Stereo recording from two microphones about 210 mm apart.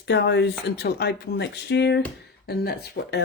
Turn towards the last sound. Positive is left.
turn(degrees=50)  # may be behind; listen again after turning